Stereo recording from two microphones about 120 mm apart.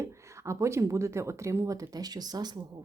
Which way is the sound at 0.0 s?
25° right (ahead or behind).